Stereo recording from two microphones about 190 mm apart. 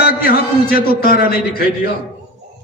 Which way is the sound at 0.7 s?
50° left (ahead or behind).